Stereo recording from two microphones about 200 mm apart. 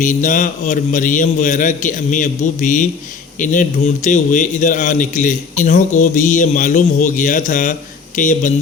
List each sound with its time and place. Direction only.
0.0 s a man's voice: 40° left (ahead or behind)